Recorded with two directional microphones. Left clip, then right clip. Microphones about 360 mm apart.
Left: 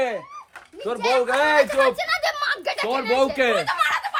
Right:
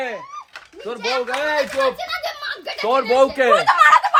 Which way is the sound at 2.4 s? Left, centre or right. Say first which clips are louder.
Left 3 dB; left.